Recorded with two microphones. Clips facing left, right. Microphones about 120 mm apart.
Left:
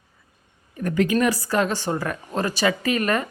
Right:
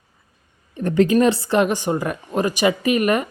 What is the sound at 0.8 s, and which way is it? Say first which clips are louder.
Speech: right 5 dB; 30° right (ahead or behind).